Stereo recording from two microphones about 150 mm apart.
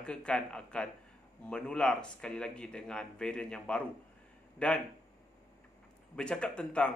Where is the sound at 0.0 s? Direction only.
5° left (ahead or behind).